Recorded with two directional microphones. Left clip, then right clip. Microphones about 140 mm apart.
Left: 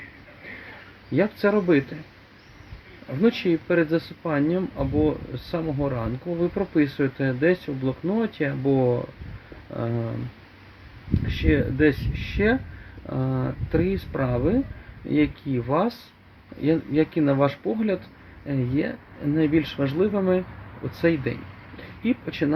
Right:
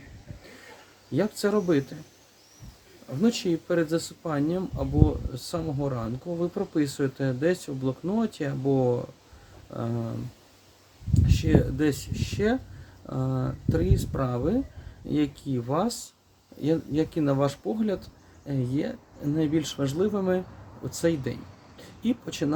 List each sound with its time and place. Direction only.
1.1 s speech: 35° right (ahead or behind)
3.2 s speech: 40° right (ahead or behind)
11.3 s speech: 40° right (ahead or behind)